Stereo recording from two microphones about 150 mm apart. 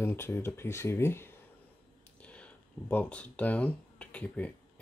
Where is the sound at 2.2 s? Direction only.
10° left (ahead or behind).